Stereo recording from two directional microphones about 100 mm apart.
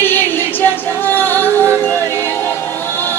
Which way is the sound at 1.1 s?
20° left (ahead or behind).